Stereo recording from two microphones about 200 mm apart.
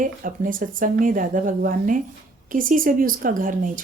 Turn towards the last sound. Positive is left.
turn(degrees=-40)  # may be behind; listen again after turning